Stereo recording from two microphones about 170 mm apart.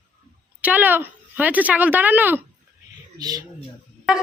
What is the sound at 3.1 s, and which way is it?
Speech, 20° right (ahead or behind).